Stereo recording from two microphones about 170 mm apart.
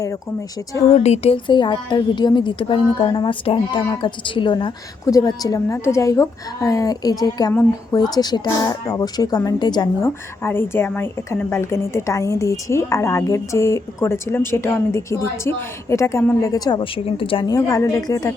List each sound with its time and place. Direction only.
0.9 s a woman's voice: 40° left (ahead or behind); by 18.3 s 20° left (ahead or behind)